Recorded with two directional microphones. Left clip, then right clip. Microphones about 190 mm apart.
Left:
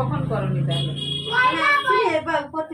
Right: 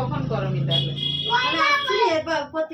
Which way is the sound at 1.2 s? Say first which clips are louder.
Left 2 dB; centre (ahead or behind).